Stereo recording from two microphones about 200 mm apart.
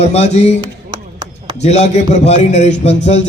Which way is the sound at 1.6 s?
35° left (ahead or behind).